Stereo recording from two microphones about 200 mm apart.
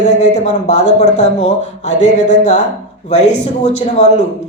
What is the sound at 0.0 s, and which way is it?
Speech, 35° left (ahead or behind).